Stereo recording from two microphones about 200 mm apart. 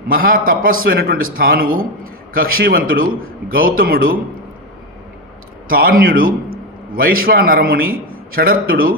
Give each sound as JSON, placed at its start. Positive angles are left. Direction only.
{"t": 0.1, "sound": "a man's voice", "side_deg": -45}
{"t": 5.7, "sound": "a man's voice", "side_deg": -50}